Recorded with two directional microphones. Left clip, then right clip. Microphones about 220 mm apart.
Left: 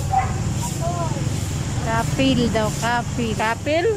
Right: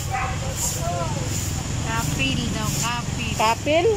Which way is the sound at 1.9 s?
35° left (ahead or behind).